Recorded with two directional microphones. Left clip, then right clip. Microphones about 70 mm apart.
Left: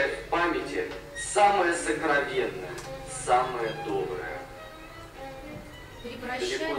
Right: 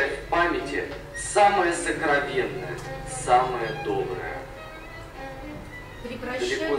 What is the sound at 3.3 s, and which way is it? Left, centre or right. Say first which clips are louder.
Speech: right 4 dB; centre.